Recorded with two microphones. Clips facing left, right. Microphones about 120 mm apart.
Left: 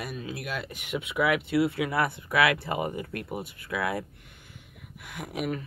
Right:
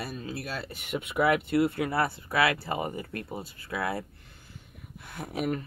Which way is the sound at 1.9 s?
30° right (ahead or behind).